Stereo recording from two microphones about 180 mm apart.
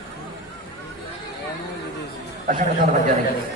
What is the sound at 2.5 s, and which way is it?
Speech, 45° right (ahead or behind).